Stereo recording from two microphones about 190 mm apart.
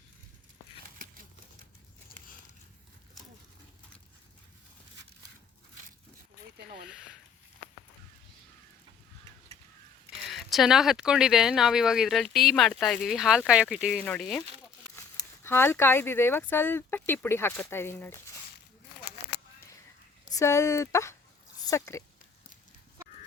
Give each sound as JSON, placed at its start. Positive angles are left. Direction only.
{"t": 6.7, "sound": "a sound", "side_deg": -50}
{"t": 10.2, "sound": "speech", "side_deg": 0}
{"t": 15.4, "sound": "speech", "side_deg": 10}
{"t": 20.3, "sound": "speech", "side_deg": 15}